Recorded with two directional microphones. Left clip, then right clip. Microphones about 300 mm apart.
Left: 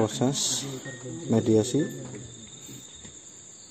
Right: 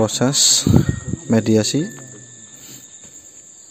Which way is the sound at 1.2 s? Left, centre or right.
Right.